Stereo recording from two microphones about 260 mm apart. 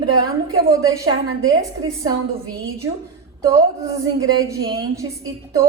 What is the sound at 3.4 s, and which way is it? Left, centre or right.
A woman's voice, centre.